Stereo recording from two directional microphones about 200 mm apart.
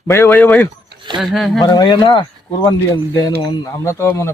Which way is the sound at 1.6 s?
20° left (ahead or behind).